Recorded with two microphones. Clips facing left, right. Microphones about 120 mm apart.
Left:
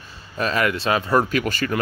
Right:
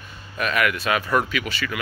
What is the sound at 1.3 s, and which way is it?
Speech, 45° left (ahead or behind).